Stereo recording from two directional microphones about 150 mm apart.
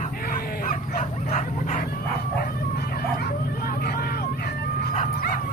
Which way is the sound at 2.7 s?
90° left.